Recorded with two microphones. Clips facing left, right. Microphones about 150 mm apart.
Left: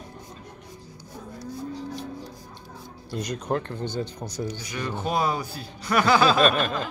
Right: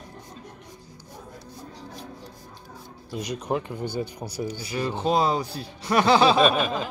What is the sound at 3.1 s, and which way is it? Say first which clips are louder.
Speech: even; centre (ahead or behind).